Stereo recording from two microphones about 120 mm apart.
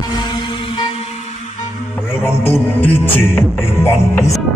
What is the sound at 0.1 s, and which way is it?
Music, 35° left (ahead or behind).